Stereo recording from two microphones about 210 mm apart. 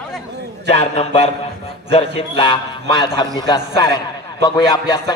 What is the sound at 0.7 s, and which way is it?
A man's voice, 30° left (ahead or behind).